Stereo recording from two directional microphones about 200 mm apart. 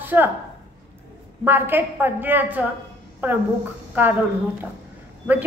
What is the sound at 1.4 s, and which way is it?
A woman's voice, 10° right (ahead or behind).